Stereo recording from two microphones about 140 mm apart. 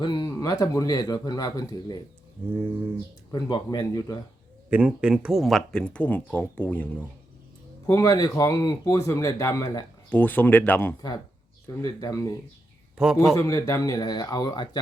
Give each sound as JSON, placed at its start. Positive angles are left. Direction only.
{"t": 0.0, "sound": "speech", "side_deg": 30}
{"t": 3.3, "sound": "speech", "side_deg": 30}
{"t": 4.7, "sound": "speech", "side_deg": -10}
{"t": 7.9, "sound": "speech", "side_deg": 25}
{"t": 11.8, "sound": "speech", "side_deg": 25}